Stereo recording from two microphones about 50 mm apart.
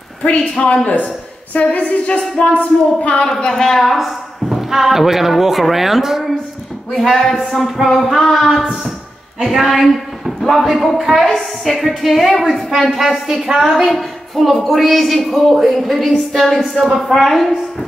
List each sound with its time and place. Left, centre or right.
0.8 s a woman's voice: left
3.6 s speech: centre
7.6 s a woman's voice: centre